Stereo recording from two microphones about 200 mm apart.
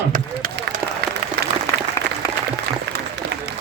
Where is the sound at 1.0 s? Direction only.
55° right (ahead or behind).